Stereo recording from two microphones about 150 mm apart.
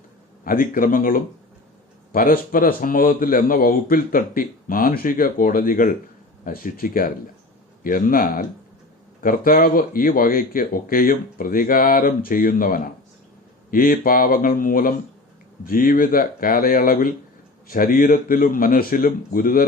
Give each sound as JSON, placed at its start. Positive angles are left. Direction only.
{"t": 0.4, "sound": "a man's voice", "side_deg": 70}